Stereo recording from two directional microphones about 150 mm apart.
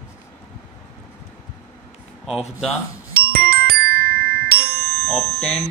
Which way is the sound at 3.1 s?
90° right.